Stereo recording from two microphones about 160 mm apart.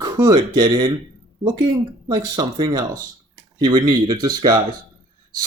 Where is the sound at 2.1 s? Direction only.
25° right (ahead or behind).